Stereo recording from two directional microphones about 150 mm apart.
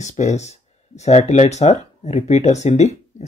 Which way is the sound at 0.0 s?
50° left (ahead or behind).